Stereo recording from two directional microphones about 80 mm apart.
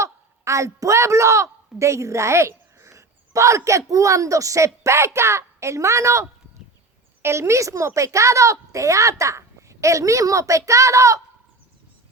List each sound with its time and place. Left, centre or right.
0.0 s a woman's voice: right